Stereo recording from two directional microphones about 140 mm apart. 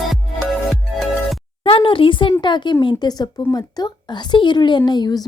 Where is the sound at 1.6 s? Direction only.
40° left (ahead or behind).